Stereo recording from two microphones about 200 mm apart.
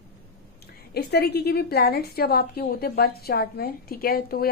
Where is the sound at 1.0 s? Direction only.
55° left (ahead or behind).